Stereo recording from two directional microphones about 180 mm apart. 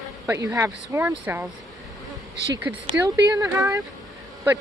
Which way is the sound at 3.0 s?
15° right (ahead or behind).